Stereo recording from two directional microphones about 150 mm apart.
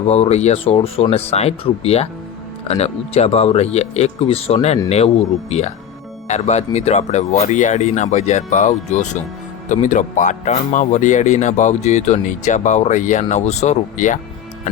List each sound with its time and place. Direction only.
0.1 s speech: 45° left (ahead or behind)